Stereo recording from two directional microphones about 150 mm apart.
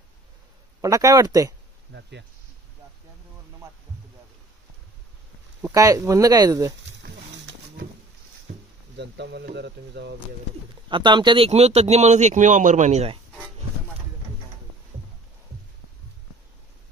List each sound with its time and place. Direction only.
0.7 s speech: 20° right (ahead or behind)
5.6 s speech: 20° right (ahead or behind)
8.5 s a sound: 90° right
10.9 s speech: 30° right (ahead or behind)